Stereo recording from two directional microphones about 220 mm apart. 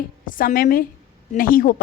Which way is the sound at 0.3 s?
40° left (ahead or behind).